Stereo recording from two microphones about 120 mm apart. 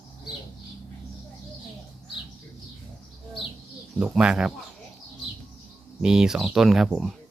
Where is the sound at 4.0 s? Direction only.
10° right (ahead or behind).